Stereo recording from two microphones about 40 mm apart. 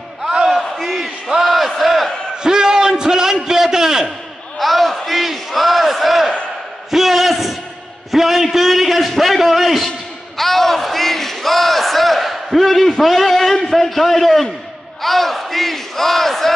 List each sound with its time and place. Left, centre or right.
0.5 s battle cry: centre
1.3 s crowd: centre
2.4 s a sound: centre
4.6 s battle cry: centre
6.9 s a sound: centre
9.8 s battle cry: centre